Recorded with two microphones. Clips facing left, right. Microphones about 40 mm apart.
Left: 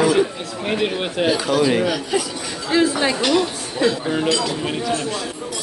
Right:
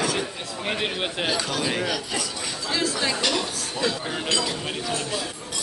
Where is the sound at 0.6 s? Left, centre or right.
Centre.